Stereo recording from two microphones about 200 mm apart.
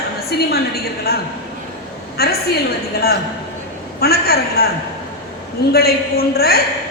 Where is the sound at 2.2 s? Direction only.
50° left (ahead or behind).